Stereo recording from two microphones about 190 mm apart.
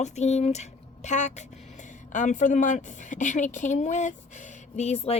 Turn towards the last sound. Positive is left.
turn(degrees=35)  # may be behind; listen again after turning